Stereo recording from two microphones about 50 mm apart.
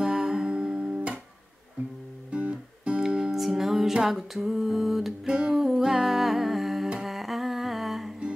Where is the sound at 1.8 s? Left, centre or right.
Right.